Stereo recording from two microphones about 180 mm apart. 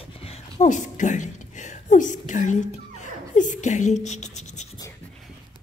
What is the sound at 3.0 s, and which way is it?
Scratch, 45° left (ahead or behind).